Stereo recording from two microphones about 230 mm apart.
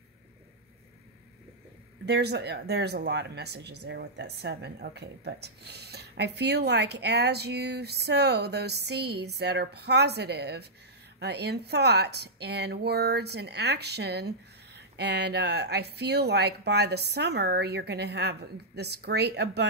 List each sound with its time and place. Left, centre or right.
2.0 s speech: right